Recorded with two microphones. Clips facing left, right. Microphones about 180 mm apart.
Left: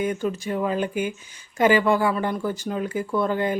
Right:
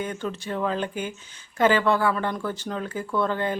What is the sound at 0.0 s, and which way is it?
A woman's voice, 10° left (ahead or behind).